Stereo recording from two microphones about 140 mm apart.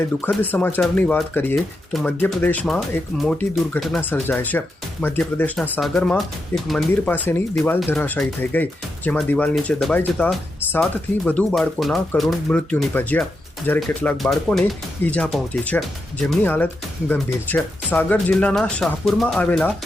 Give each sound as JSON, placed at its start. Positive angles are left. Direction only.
{"t": 0.4, "sound": "speech", "side_deg": 15}
{"t": 1.9, "sound": "speech", "side_deg": 0}
{"t": 2.1, "sound": "speech", "side_deg": 15}
{"t": 4.1, "sound": "speech", "side_deg": 15}
{"t": 7.1, "sound": "speech", "side_deg": 15}
{"t": 11.3, "sound": "speech", "side_deg": 10}